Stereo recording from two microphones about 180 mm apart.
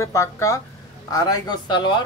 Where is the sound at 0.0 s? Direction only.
15° left (ahead or behind).